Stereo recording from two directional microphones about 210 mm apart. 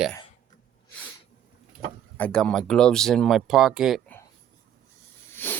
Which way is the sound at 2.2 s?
5° left (ahead or behind).